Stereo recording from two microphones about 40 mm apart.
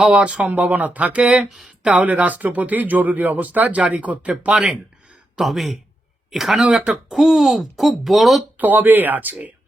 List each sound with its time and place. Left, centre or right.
0.1 s speech: right
0.7 s speech: right
1.6 s a sound: right
2.0 s speech: right
5.4 s speech: centre
6.7 s speech: right
7.1 s speech: centre
8.5 s speech: right